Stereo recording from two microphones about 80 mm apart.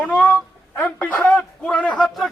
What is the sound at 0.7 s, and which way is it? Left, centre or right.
A man's voice, centre.